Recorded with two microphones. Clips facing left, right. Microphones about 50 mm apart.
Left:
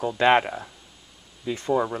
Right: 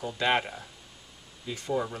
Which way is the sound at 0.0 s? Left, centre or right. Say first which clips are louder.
Left 8 dB; left.